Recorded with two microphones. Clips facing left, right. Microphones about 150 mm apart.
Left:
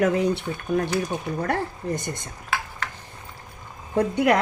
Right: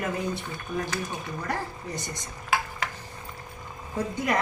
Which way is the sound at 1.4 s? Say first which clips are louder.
Left 5 dB; 55° left (ahead or behind).